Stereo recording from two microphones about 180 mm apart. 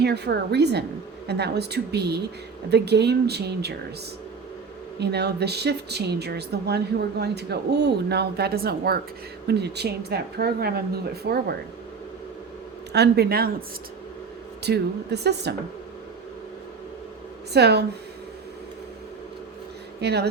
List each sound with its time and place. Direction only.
0.0 s a woman's voice: 65° right (ahead or behind)
4.9 s a woman's voice: 65° right (ahead or behind)
12.9 s a woman's voice: 65° right (ahead or behind)
14.6 s speech: 65° right (ahead or behind)
17.5 s speech: 65° right (ahead or behind)
20.0 s speech: 65° right (ahead or behind)